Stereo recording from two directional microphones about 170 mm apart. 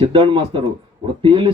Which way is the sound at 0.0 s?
30° right (ahead or behind).